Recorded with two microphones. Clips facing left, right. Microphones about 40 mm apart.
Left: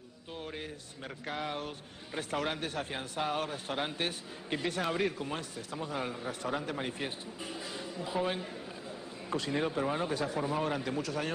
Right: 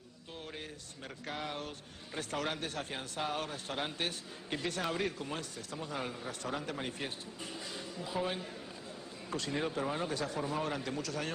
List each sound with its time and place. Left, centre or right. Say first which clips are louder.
0.5 s speech: left 4 dB; centre